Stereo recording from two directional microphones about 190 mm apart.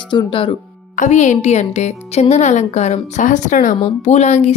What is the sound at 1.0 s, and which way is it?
A woman's voice, 40° left (ahead or behind).